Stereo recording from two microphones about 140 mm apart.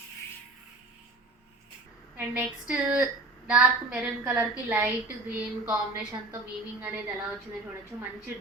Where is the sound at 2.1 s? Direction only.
15° right (ahead or behind).